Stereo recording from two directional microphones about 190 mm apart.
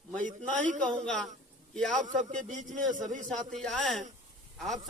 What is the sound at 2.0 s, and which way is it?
Speech, 40° right (ahead or behind).